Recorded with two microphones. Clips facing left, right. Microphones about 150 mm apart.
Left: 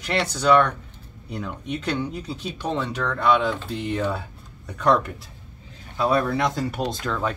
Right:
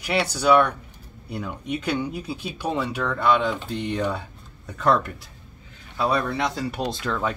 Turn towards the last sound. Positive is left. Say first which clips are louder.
# even
turn(degrees=0)  # may be behind; listen again after turning